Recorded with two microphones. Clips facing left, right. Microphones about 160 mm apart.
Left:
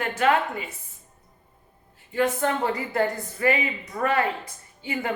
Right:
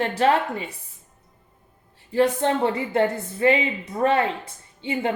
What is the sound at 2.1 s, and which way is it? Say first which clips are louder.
Speech: right 4 dB; 30° right (ahead or behind).